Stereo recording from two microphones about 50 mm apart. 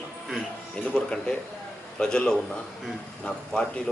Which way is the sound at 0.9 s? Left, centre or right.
Centre.